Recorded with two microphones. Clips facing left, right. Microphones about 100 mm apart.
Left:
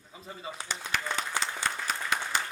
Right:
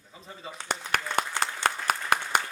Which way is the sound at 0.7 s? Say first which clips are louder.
Right 5 dB; 55° right (ahead or behind).